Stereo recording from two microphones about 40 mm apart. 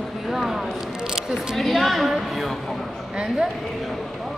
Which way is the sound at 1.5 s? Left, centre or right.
Centre.